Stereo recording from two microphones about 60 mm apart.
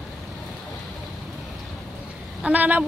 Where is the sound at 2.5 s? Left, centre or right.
Right.